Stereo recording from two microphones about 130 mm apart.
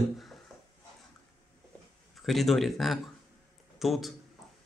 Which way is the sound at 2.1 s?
Centre (ahead or behind).